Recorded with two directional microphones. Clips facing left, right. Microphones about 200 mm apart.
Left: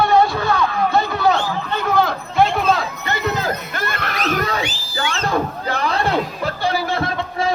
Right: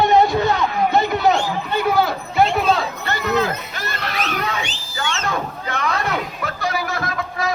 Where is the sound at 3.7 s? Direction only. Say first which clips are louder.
Left 2 dB; 55° left (ahead or behind).